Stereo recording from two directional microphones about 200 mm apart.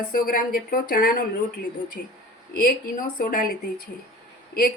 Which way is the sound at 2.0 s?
55° left (ahead or behind).